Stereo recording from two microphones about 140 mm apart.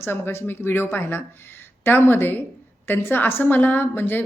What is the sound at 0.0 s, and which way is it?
A woman's voice, 20° left (ahead or behind).